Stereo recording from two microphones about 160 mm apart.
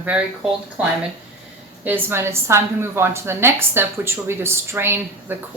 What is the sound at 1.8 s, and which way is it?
A woman's voice, 15° right (ahead or behind).